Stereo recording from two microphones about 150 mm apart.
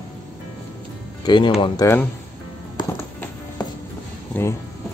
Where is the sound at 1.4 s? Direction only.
40° left (ahead or behind).